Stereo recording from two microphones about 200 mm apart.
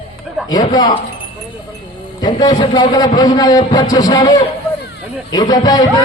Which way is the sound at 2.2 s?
20° left (ahead or behind).